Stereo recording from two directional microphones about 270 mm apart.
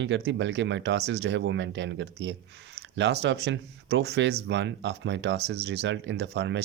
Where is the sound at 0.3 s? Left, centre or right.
Right.